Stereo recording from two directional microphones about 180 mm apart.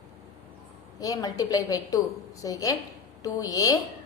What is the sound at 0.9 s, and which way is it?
A woman's voice, 20° left (ahead or behind).